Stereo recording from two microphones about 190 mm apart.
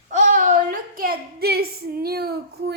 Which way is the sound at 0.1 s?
40° right (ahead or behind).